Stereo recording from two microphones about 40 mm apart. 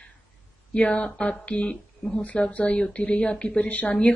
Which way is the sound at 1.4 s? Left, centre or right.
Left.